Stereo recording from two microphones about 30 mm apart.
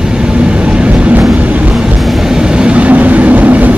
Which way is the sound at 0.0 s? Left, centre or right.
Right.